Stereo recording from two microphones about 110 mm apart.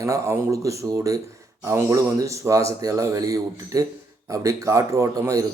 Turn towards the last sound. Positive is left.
turn(degrees=-30)  # may be behind; listen again after turning